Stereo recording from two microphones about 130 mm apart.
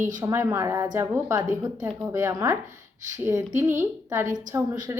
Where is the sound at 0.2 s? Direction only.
25° right (ahead or behind).